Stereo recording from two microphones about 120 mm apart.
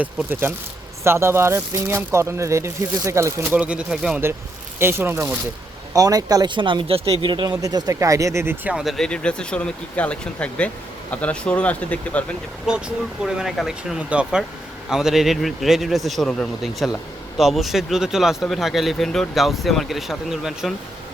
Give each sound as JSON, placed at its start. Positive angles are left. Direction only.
{"t": 0.0, "sound": "speech", "side_deg": -15}
{"t": 3.6, "sound": "speech", "side_deg": -10}
{"t": 4.8, "sound": "speech", "side_deg": -20}
{"t": 5.9, "sound": "speech", "side_deg": -30}
{"t": 8.7, "sound": "speech", "side_deg": 0}
{"t": 12.7, "sound": "a man's voice", "side_deg": -5}